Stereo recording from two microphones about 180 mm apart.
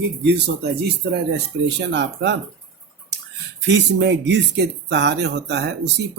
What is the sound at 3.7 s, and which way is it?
Speech, 75° right (ahead or behind).